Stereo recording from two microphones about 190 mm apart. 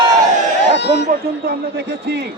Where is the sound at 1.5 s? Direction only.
60° right (ahead or behind).